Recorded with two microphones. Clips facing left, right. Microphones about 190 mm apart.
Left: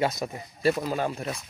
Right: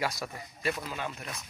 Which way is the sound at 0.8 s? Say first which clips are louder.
Left 9 dB; 40° left (ahead or behind).